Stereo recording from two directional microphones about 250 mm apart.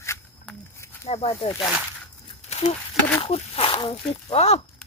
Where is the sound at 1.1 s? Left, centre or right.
Left.